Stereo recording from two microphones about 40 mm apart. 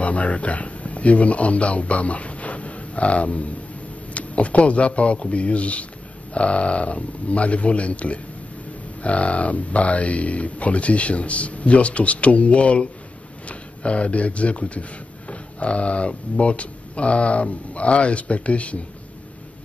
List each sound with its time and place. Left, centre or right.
0.0 s speech: left